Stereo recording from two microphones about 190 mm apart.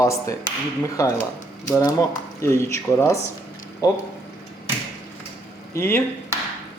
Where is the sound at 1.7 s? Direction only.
15° left (ahead or behind).